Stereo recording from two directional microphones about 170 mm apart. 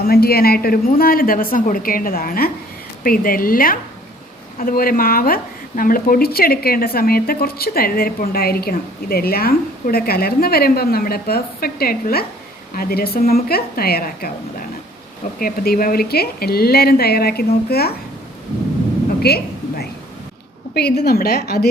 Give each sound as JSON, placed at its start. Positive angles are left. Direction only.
{"t": 0.0, "sound": "a woman's voice", "side_deg": 65}
{"t": 15.4, "sound": "a woman's voice", "side_deg": 60}
{"t": 19.2, "sound": "a sound", "side_deg": 65}
{"t": 20.7, "sound": "a woman's voice", "side_deg": 75}